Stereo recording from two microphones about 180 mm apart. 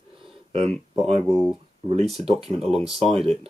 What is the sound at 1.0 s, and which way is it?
Speech, 35° right (ahead or behind).